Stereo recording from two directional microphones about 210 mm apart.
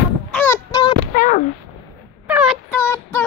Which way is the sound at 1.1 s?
40° left (ahead or behind).